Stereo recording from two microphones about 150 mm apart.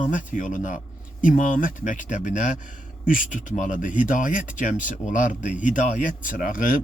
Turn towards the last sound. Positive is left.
turn(degrees=65)  # may be behind; listen again after turning